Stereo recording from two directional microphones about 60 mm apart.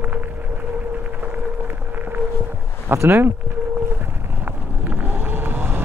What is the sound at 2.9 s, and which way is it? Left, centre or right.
Speech, right.